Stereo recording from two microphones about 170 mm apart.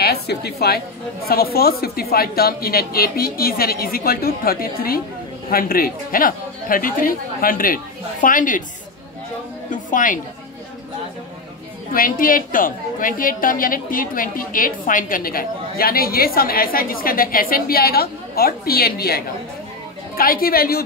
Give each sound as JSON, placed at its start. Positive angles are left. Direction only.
{"t": 0.0, "sound": "a woman's voice", "side_deg": 70}
{"t": 9.7, "sound": "a sound", "side_deg": 50}
{"t": 11.9, "sound": "a woman's voice", "side_deg": 55}